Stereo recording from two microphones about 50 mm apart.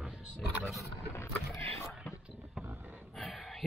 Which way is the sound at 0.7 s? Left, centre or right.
Left.